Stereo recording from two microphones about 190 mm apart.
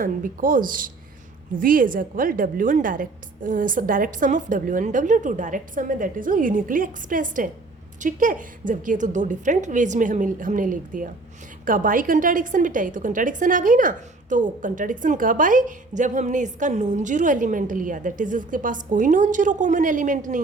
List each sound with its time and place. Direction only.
0.0 s a woman's voice: 45° right (ahead or behind)